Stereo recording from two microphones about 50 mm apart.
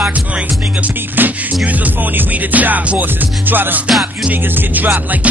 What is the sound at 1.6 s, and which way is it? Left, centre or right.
Music, right.